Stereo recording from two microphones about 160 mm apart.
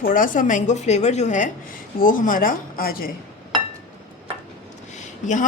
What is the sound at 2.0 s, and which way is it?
Speech, 60° left (ahead or behind).